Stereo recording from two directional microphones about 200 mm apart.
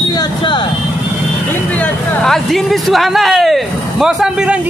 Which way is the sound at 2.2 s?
Centre (ahead or behind).